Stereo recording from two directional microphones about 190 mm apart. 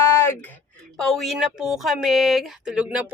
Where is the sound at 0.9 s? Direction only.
Centre (ahead or behind).